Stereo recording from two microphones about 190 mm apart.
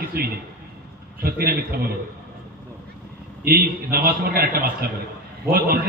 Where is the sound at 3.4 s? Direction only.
50° right (ahead or behind).